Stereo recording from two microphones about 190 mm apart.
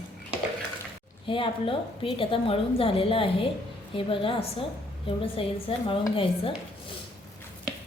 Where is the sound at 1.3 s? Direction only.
25° left (ahead or behind).